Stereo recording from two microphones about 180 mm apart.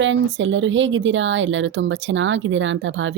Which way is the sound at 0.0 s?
90° right.